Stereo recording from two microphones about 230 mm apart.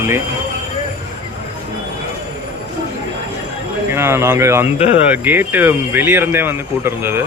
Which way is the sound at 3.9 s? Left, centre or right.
Centre.